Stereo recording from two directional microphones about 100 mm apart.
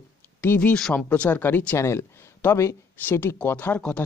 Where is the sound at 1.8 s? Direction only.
25° left (ahead or behind).